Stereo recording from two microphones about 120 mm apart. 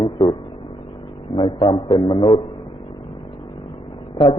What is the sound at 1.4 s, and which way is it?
A man's voice, 45° left (ahead or behind).